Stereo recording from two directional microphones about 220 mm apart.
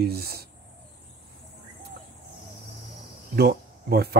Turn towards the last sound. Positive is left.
turn(degrees=-45)  # may be behind; listen again after turning